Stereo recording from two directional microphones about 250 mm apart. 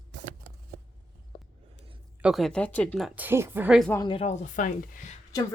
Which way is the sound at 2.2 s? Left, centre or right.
Centre.